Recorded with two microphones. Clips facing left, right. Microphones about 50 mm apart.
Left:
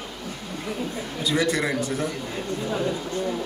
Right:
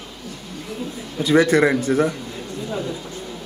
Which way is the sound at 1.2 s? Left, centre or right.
Right.